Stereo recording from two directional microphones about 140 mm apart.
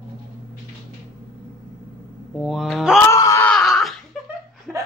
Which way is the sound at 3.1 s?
20° left (ahead or behind).